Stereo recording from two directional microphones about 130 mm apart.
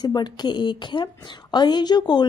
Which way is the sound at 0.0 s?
35° left (ahead or behind).